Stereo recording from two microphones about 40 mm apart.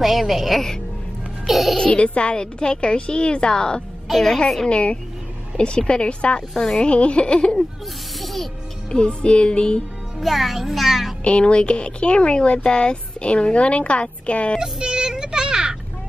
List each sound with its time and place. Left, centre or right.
0.0 s a child's voice: centre
1.8 s a woman's voice: left
4.1 s a woman's voice: centre
4.6 s a woman's voice: left
6.5 s a woman's voice: centre
6.8 s a woman's voice: left
8.2 s music: centre
8.9 s a woman's voice: left
10.2 s a child's voice: centre
11.2 s a woman's voice: left
14.6 s speech: right